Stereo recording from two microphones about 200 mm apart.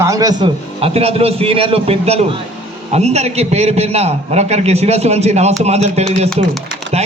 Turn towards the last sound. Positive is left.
turn(degrees=-30)  # may be behind; listen again after turning